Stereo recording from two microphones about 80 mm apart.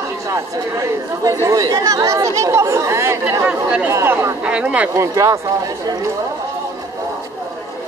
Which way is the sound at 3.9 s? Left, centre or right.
Right.